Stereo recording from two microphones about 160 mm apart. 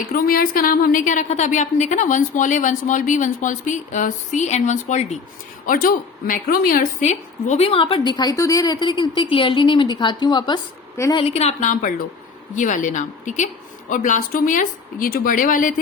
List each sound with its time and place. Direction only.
0.1 s a woman's voice: 65° left (ahead or behind); by 5.1 s 45° left (ahead or behind)
5.6 s a woman's voice: 60° left (ahead or behind); by 10.6 s 30° left (ahead or behind)
10.9 s a woman's voice: 20° left (ahead or behind)
11.2 s a woman's voice: 40° left (ahead or behind); by 15.7 s 55° left (ahead or behind)